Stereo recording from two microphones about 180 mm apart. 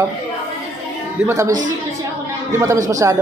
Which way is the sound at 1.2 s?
15° right (ahead or behind).